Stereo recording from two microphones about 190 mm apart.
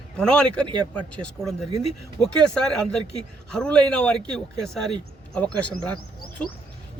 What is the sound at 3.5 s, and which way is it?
A man's voice, 5° left (ahead or behind).